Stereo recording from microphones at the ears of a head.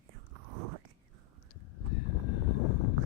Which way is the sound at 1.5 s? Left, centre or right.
Left.